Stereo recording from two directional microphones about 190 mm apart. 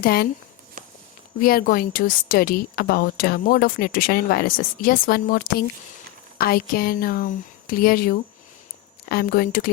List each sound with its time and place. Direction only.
0.0 s speech: 55° left (ahead or behind)
1.4 s speech: 50° left (ahead or behind)